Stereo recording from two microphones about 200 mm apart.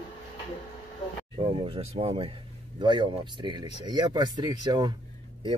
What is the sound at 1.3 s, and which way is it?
Speech, 25° right (ahead or behind).